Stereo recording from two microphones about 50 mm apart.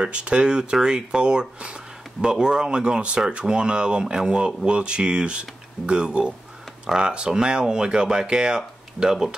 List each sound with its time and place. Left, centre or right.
0.0 s speech: right